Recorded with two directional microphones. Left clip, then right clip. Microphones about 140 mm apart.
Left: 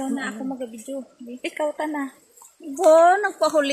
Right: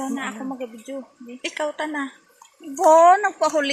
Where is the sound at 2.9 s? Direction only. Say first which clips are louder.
Right 2 dB; 45° left (ahead or behind).